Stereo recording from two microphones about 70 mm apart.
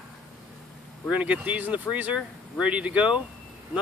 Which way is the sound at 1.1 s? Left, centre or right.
Centre.